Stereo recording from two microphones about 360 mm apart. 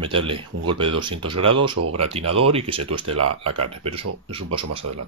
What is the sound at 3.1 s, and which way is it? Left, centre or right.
Speech, right.